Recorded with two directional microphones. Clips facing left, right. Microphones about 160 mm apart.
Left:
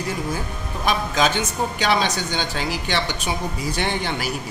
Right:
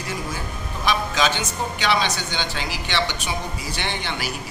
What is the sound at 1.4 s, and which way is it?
A woman's voice, 45° left (ahead or behind).